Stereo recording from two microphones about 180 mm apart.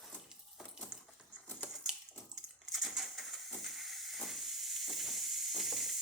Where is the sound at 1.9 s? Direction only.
Centre (ahead or behind).